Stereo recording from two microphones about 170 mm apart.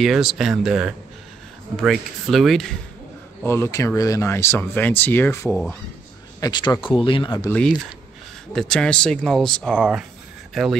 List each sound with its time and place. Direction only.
0.0 s speech: centre (ahead or behind)
3.4 s speech: 15° left (ahead or behind)
5.5 s speech: 5° left (ahead or behind)
6.4 s speech: 25° left (ahead or behind)
7.4 s speech: 5° left (ahead or behind)